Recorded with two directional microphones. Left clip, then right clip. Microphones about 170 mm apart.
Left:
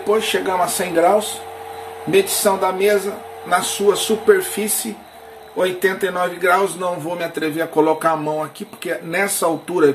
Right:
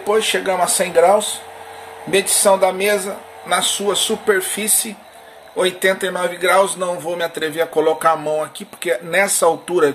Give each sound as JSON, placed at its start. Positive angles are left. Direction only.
{"t": 0.1, "sound": "speech", "side_deg": -45}